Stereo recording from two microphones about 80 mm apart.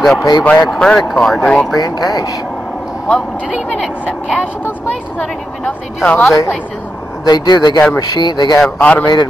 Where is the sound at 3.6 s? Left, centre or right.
Centre.